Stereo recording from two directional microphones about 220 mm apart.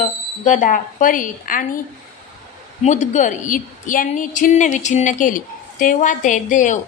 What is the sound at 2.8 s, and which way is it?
A woman's voice, 30° left (ahead or behind).